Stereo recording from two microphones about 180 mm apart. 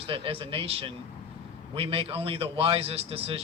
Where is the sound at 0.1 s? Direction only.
30° right (ahead or behind).